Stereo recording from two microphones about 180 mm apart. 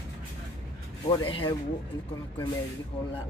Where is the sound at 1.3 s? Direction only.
30° left (ahead or behind).